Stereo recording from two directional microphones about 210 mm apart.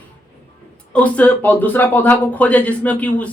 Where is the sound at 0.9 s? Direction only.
5° left (ahead or behind).